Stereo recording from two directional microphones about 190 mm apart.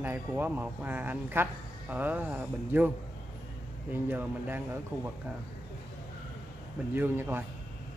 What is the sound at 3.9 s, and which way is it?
Speech, 10° right (ahead or behind).